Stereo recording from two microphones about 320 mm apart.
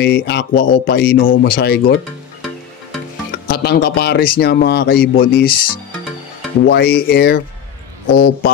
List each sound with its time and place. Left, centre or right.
0.0 s speech: left
3.4 s speech: left
6.6 s speech: left